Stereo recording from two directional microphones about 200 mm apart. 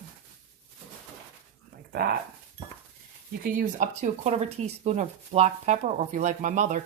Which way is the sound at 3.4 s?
45° right (ahead or behind).